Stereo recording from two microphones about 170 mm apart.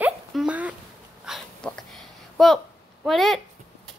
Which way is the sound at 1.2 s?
Centre (ahead or behind).